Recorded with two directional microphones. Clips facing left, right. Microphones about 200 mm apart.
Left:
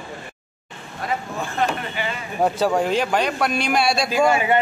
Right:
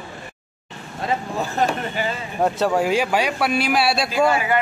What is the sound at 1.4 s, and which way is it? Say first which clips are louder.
Speech: right 1 dB; 40° right (ahead or behind).